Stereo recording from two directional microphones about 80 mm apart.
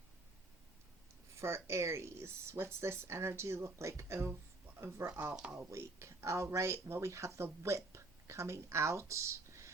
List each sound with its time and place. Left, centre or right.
1.4 s speech: right
5.3 s speech: centre
5.7 s speech: right